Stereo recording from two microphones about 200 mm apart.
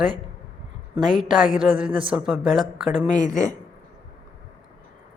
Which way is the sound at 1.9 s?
25° right (ahead or behind).